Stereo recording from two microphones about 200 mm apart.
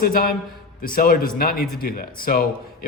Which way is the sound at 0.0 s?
45° left (ahead or behind).